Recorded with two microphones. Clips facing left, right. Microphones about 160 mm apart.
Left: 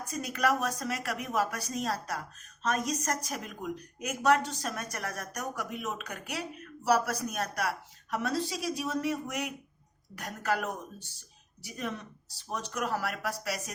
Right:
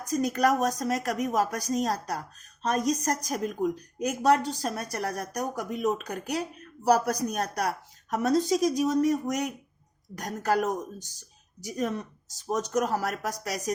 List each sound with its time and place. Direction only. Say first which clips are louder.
0.0 s a woman's voice: right 6 dB; 40° right (ahead or behind)